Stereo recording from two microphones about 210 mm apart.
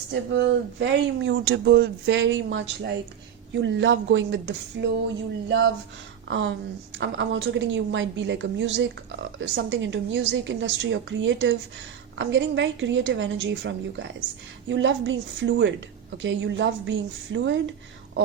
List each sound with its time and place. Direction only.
0.1 s speech: 55° right (ahead or behind)